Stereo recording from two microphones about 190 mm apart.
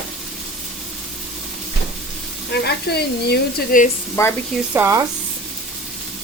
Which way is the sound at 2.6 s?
60° left (ahead or behind).